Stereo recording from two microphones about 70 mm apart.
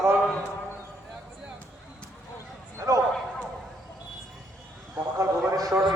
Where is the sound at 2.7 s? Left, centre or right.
Right.